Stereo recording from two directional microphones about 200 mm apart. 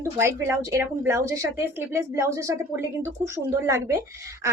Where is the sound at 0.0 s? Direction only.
15° right (ahead or behind).